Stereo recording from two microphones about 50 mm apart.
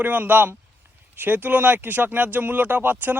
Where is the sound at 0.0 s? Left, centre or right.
Right.